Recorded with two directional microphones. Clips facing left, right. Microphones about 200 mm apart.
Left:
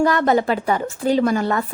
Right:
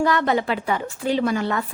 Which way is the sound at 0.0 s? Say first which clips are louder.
Left 3 dB; 45° left (ahead or behind).